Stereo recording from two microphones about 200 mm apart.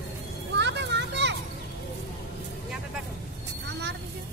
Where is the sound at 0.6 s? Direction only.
60° right (ahead or behind).